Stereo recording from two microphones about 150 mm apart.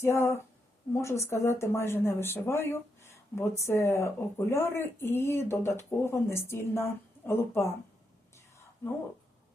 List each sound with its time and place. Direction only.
0.0 s speech: 20° left (ahead or behind)